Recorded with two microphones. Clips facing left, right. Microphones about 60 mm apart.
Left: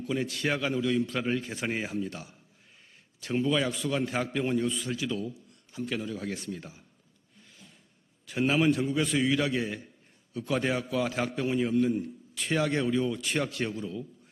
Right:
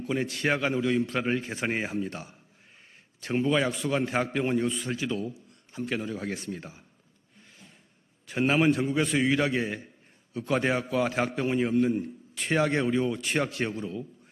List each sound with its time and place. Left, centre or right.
0.0 s a man's voice: right
7.4 s a sound: right
8.3 s a man's voice: right
9.0 s a man's voice: right